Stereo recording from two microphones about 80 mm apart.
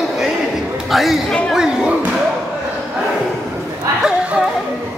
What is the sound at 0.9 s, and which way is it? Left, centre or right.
Speech, centre.